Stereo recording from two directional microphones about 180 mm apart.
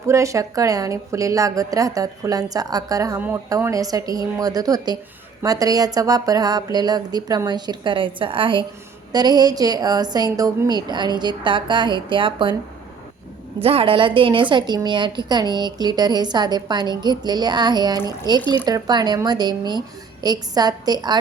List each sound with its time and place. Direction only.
0.1 s a woman's voice: 15° right (ahead or behind)
13.6 s a woman's voice: 30° right (ahead or behind)